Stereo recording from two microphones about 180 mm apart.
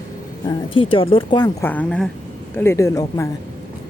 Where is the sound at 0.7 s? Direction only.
30° left (ahead or behind).